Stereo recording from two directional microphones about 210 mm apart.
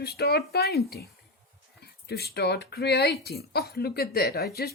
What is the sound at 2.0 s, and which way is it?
Speech, 50° left (ahead or behind).